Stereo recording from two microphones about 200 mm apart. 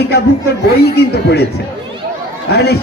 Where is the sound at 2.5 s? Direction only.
55° left (ahead or behind).